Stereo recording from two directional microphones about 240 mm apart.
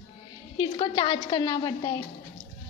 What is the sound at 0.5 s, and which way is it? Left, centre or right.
A woman's voice, centre.